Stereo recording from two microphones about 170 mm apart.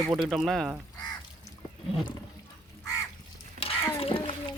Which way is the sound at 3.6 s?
35° left (ahead or behind).